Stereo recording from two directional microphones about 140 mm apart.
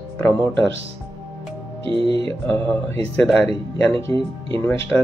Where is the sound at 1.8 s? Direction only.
40° right (ahead or behind).